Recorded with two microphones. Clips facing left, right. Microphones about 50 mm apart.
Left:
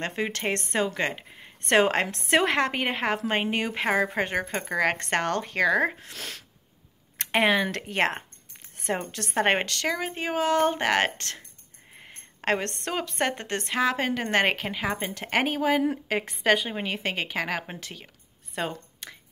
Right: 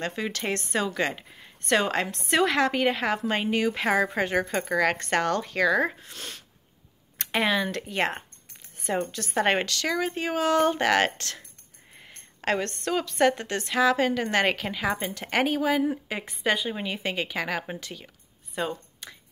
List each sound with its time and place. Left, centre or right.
0.0 s speech: left
1.7 s a woman's voice: left
2.0 s a woman's voice: left
2.3 s a woman's voice: left
4.9 s speech: left
6.0 s speech: left
7.2 s speech: left
8.7 s a sound: left
9.1 s speech: left
9.8 s a woman's voice: left
16.1 s a woman's voice: left
19.0 s a sound: left